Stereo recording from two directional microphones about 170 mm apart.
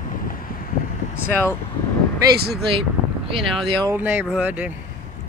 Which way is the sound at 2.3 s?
70° right (ahead or behind).